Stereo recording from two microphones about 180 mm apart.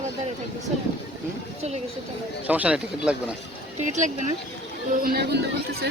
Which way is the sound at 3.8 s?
45° right (ahead or behind).